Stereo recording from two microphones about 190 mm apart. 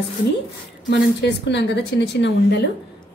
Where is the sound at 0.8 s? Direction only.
65° left (ahead or behind).